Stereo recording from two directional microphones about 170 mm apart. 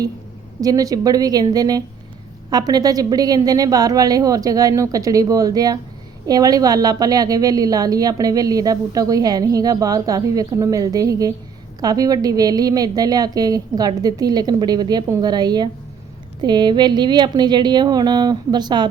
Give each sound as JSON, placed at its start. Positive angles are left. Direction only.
{"t": 0.6, "sound": "a woman's voice", "side_deg": -20}